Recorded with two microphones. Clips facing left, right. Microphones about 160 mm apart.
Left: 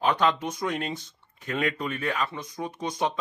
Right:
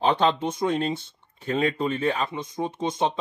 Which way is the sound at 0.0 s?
30° right (ahead or behind).